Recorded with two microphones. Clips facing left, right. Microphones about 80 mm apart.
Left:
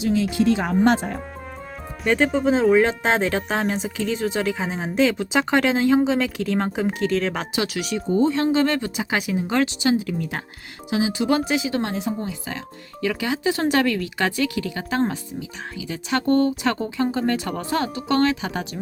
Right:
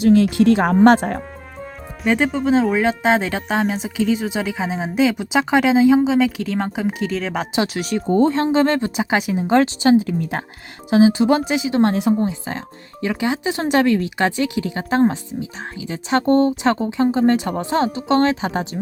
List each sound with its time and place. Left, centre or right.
0.0 s speech: right
2.0 s speech: centre
7.5 s speech: right
7.9 s speech: right
8.5 s speech: right
12.2 s speech: right